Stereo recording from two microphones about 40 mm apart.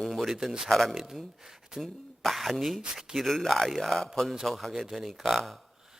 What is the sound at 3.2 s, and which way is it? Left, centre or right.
A man's voice, centre.